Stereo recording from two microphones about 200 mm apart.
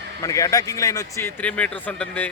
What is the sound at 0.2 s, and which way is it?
Speech, 15° left (ahead or behind).